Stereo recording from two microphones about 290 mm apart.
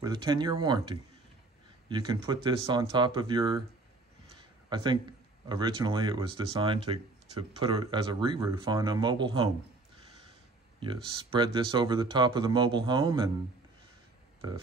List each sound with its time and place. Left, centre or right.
0.0 s speech: centre
4.4 s a sound: centre
5.5 s speech: centre
10.8 s speech: centre